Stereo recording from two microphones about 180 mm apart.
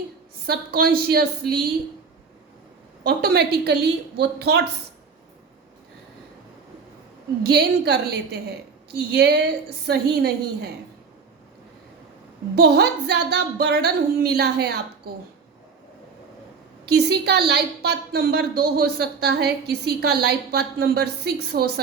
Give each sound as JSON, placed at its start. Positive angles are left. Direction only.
{"t": 0.4, "sound": "a woman's voice", "side_deg": -60}
{"t": 3.0, "sound": "a woman's voice", "side_deg": -60}
{"t": 7.4, "sound": "a woman's voice", "side_deg": -65}
{"t": 12.5, "sound": "a woman's voice", "side_deg": -65}
{"t": 16.8, "sound": "a woman's voice", "side_deg": -65}